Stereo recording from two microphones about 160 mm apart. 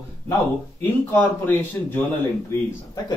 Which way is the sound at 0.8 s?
10° left (ahead or behind).